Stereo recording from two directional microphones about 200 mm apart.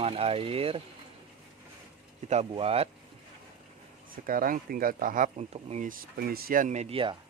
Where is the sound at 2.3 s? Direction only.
30° right (ahead or behind).